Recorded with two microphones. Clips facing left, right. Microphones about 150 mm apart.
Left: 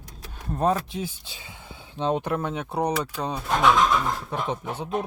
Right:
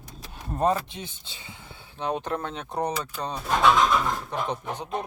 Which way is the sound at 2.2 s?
10° left (ahead or behind).